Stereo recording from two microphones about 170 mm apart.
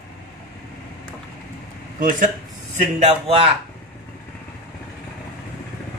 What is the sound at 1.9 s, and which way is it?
Speech, 50° right (ahead or behind).